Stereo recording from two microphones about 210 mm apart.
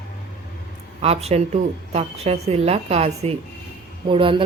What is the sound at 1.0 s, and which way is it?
Speech, 30° right (ahead or behind).